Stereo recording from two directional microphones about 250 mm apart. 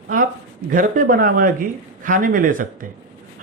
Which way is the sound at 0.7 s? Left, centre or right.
Right.